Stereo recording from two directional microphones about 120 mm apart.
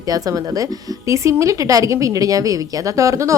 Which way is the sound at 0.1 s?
30° right (ahead or behind).